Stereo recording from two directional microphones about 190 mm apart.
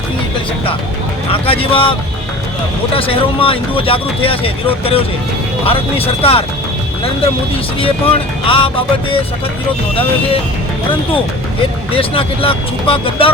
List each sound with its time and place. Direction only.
1.3 s speech: 30° left (ahead or behind)
7.5 s speech: 30° left (ahead or behind)
11.9 s speech: 30° left (ahead or behind)